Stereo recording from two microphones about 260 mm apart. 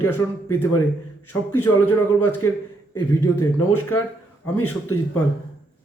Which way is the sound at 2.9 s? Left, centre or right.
Centre.